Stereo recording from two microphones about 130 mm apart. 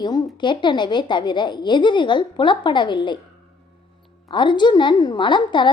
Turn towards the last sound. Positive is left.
turn(degrees=35)  # may be behind; listen again after turning